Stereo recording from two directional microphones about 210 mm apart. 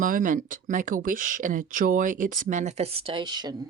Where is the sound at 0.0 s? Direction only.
40° right (ahead or behind).